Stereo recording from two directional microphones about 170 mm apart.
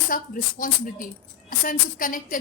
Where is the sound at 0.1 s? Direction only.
55° left (ahead or behind).